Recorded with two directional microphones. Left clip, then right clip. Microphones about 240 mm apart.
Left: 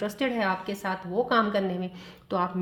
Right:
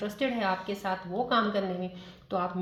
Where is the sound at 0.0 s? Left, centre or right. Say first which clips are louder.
Left 2 dB; left.